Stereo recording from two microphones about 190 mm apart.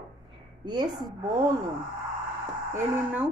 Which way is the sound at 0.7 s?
20° right (ahead or behind).